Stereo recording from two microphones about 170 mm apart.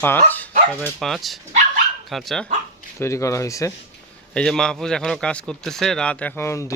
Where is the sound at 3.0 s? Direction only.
15° left (ahead or behind).